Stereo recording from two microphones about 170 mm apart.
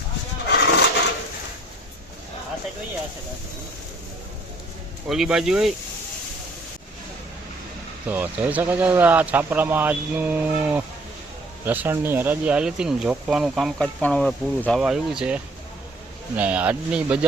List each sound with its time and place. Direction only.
0.5 s a sound: 85° left
5.0 s speech: centre (ahead or behind)
8.0 s speech: 10° right (ahead or behind)